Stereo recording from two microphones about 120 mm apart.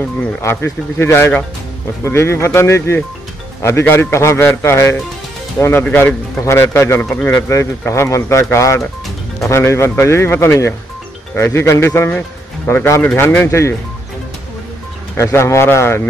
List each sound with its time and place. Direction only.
0.4 s a man's voice: 20° left (ahead or behind)
13.5 s a man's voice: 25° left (ahead or behind)
15.1 s a man's voice: 20° left (ahead or behind)